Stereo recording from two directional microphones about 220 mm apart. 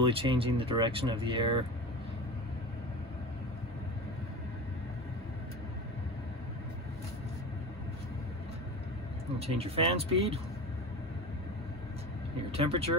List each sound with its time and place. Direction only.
0.0 s speech: 25° right (ahead or behind)
9.4 s speech: 25° right (ahead or behind)
12.4 s speech: 25° right (ahead or behind)